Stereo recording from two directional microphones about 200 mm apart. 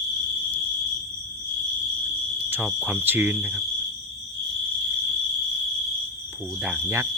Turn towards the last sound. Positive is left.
turn(degrees=-10)  # may be behind; listen again after turning